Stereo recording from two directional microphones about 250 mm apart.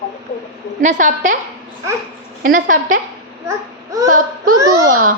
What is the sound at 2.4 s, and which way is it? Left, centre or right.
Speech, right.